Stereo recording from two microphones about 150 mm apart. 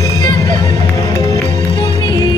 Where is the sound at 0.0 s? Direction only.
25° left (ahead or behind).